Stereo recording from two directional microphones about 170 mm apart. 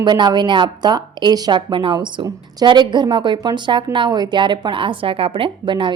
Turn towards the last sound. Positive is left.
turn(degrees=-30)  # may be behind; listen again after turning